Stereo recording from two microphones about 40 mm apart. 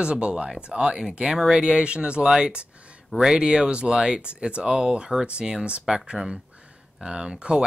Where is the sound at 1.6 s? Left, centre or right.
Right.